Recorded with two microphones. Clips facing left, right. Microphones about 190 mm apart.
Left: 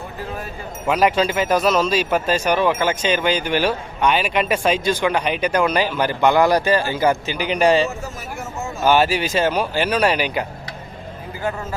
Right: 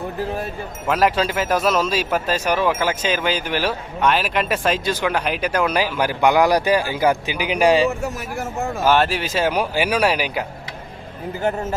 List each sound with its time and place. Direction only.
0.9 s speech: centre (ahead or behind)
8.0 s speech: 70° right (ahead or behind)
8.8 s speech: centre (ahead or behind)